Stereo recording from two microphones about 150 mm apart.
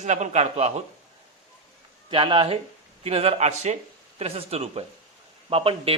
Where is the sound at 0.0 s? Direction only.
50° right (ahead or behind).